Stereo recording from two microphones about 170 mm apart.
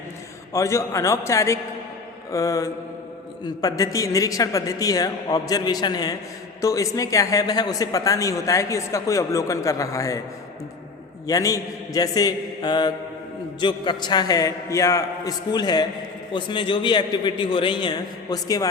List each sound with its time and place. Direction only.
0.5 s a man's voice: 15° left (ahead or behind)
11.3 s a man's voice: 20° left (ahead or behind)